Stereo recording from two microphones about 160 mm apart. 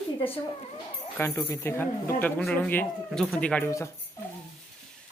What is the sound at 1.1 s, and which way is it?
Speech, 15° left (ahead or behind).